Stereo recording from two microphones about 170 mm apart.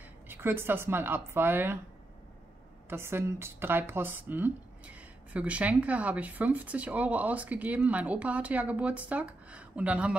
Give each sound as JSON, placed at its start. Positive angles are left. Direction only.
{"t": 0.3, "sound": "a woman's voice", "side_deg": -15}
{"t": 2.9, "sound": "a woman's voice", "side_deg": -15}